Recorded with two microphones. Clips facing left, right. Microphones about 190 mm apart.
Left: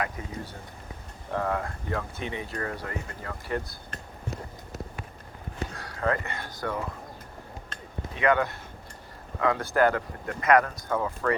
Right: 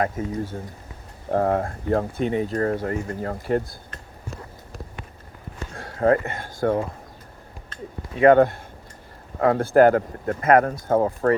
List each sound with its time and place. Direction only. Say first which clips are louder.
0.2 s speech: right 10 dB; 45° right (ahead or behind)
5.7 s speech: right 10 dB; 45° right (ahead or behind)
8.2 s speech: right 10 dB; 50° right (ahead or behind)